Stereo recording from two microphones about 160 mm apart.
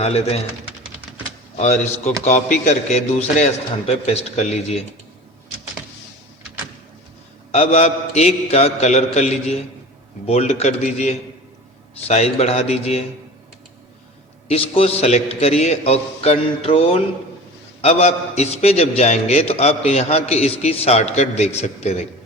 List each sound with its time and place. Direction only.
0.0 s a man's voice: 40° left (ahead or behind)
1.5 s a man's voice: 45° left (ahead or behind)
7.5 s a man's voice: 40° left (ahead or behind)
14.5 s a man's voice: 40° left (ahead or behind)